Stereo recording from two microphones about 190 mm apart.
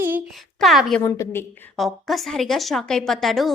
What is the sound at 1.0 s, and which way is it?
Speech, 15° left (ahead or behind).